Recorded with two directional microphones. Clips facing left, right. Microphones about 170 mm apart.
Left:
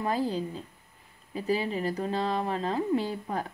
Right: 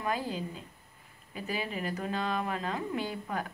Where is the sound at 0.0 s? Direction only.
35° left (ahead or behind).